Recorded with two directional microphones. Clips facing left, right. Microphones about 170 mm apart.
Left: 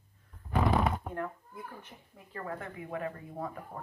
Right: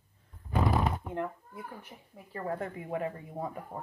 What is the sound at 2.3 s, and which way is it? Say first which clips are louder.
Speech: right 5 dB; 30° right (ahead or behind).